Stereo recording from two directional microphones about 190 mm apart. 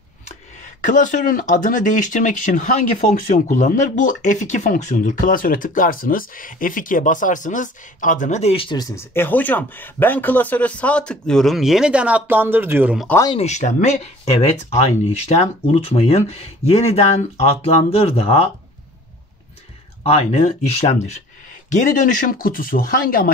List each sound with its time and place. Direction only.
0.7 s speech: 40° left (ahead or behind); by 13.0 s 10° right (ahead or behind)
13.4 s speech: 40° left (ahead or behind)
20.0 s speech: 30° left (ahead or behind); by 23.3 s 50° left (ahead or behind)